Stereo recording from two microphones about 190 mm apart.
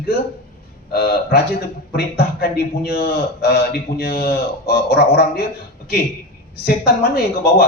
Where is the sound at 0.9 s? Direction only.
55° left (ahead or behind).